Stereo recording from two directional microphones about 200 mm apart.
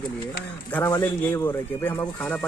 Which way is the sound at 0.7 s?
10° left (ahead or behind).